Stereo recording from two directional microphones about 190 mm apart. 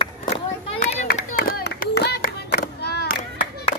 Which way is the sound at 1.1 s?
50° left (ahead or behind).